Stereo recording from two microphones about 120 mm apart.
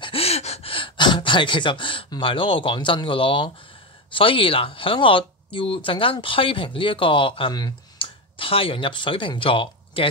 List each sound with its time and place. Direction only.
0.0 s gasp: 55° left (ahead or behind)
4.1 s speech: 50° left (ahead or behind)